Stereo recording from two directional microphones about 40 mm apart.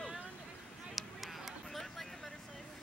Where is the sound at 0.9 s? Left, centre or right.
Centre.